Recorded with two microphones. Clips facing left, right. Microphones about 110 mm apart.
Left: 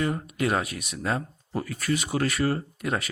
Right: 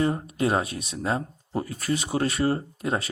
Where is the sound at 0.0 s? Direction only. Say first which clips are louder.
Right 2 dB; 30° right (ahead or behind).